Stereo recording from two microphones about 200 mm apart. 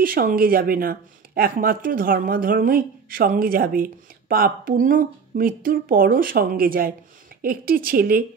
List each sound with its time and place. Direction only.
0.0 s speech: 45° right (ahead or behind)